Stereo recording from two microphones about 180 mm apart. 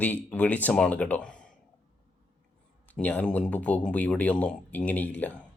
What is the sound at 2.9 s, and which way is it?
Speech, 10° left (ahead or behind).